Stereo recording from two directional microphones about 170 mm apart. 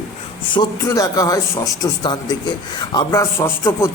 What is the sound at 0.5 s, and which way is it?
A man's voice, 20° left (ahead or behind).